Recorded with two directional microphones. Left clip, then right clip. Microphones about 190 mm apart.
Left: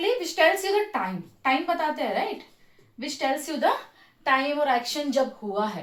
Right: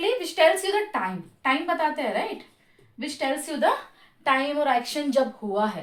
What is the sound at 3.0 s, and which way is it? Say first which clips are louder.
A woman's voice: left 1 dB; 30° right (ahead or behind).